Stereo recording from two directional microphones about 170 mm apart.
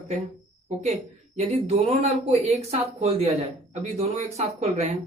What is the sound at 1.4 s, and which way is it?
Speech, 40° right (ahead or behind).